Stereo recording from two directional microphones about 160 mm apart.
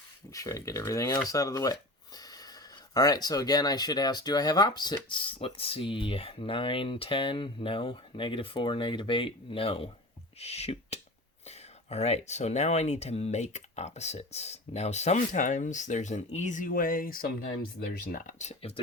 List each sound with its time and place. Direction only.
0.3 s speech: 20° left (ahead or behind); by 18.7 s 45° left (ahead or behind)